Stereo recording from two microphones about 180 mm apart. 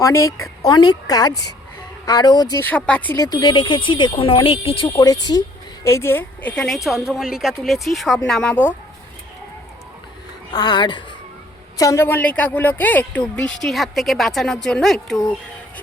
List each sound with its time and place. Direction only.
0.0 s speech: 15° left (ahead or behind)
2.6 s speech: 10° left (ahead or behind)
3.2 s speech: 25° left (ahead or behind); by 8.7 s 10° left (ahead or behind)
10.5 s speech: 25° left (ahead or behind); by 15.2 s centre (ahead or behind)